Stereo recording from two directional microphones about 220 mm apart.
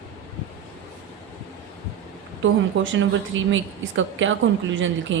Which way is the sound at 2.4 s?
60° right (ahead or behind).